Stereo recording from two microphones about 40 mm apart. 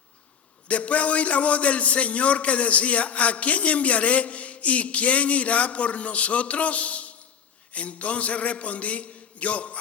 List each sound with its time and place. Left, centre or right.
0.7 s a man's voice: left